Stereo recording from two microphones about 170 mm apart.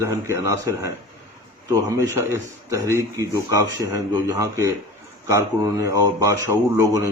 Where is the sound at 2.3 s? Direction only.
15° right (ahead or behind).